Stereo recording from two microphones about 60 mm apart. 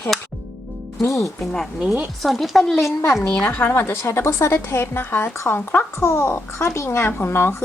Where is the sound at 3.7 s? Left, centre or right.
Left.